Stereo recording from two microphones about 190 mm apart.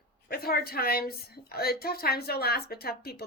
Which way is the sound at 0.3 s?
55° left (ahead or behind).